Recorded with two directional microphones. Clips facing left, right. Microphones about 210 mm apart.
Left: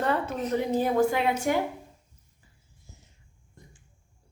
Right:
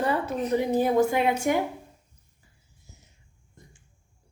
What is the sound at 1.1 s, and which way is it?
Speech, 20° right (ahead or behind).